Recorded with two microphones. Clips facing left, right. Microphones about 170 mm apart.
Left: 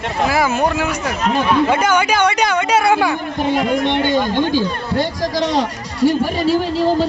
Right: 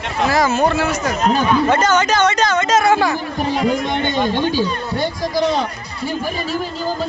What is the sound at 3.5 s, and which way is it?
Speech, 75° left (ahead or behind).